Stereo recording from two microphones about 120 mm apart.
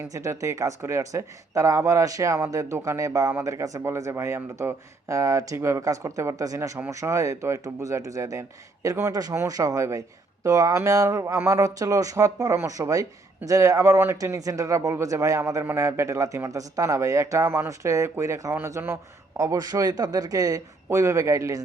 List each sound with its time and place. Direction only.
0.0 s speech: 25° right (ahead or behind)